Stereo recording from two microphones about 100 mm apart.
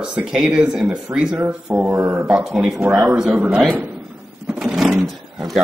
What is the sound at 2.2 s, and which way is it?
Speech, 10° right (ahead or behind).